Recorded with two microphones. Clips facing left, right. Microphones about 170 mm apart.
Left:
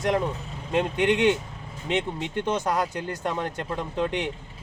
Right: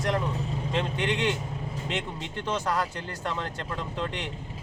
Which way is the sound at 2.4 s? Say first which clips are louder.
Left 2 dB; 20° left (ahead or behind).